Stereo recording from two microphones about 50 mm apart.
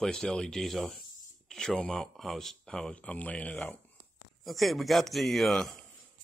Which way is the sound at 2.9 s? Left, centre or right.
Left.